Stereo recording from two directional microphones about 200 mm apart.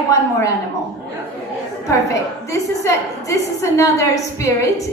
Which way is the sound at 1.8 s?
15° left (ahead or behind).